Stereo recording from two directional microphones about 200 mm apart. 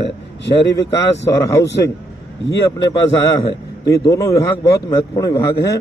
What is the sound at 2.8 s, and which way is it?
A man's voice, 20° left (ahead or behind).